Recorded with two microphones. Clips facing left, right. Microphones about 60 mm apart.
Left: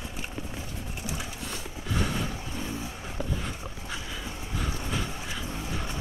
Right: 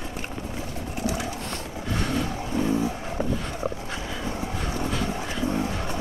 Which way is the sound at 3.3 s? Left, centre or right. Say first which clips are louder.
Right 5 dB; centre.